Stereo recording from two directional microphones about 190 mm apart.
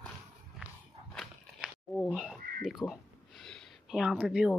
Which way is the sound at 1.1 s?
Centre (ahead or behind).